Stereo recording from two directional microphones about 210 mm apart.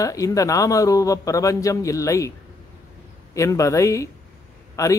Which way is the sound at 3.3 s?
15° left (ahead or behind).